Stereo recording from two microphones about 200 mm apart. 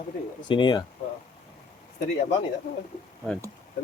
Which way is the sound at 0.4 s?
25° left (ahead or behind).